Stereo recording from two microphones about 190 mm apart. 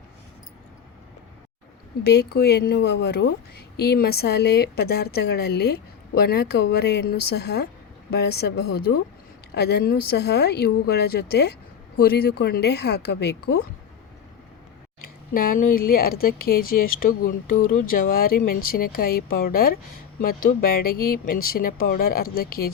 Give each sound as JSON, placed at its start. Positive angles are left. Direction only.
{"t": 2.0, "sound": "a woman's voice", "side_deg": 60}
{"t": 15.3, "sound": "speech", "side_deg": 50}